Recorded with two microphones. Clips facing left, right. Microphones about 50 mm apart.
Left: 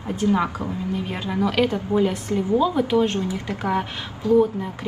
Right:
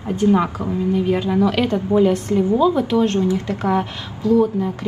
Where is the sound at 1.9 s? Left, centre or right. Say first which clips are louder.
Right 5 dB; left.